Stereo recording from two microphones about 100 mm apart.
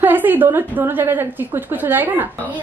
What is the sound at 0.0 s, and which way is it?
A woman's voice, 20° right (ahead or behind).